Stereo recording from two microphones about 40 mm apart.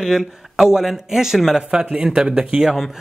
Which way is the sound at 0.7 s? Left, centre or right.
Centre.